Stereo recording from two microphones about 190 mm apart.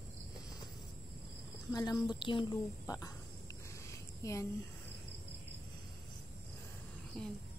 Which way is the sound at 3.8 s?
15° left (ahead or behind).